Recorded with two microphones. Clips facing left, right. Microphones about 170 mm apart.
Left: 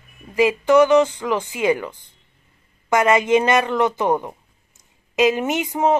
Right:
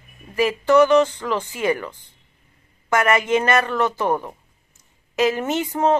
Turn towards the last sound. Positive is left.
turn(degrees=15)  # may be behind; listen again after turning